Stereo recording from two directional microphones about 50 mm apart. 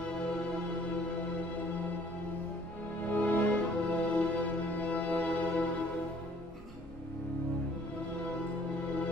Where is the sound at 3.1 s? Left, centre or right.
Left.